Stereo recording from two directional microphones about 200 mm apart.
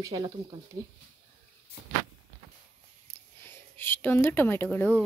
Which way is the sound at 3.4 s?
10° left (ahead or behind).